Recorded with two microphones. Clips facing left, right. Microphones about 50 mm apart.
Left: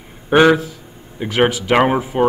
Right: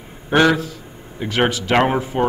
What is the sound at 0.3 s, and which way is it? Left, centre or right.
Speech, centre.